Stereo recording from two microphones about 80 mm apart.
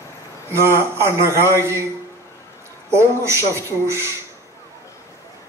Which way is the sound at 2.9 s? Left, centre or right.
Right.